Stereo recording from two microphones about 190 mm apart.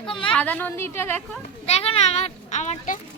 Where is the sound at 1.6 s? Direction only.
35° left (ahead or behind).